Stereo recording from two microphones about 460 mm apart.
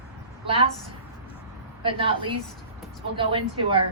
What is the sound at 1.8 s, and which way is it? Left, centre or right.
A woman's voice, centre.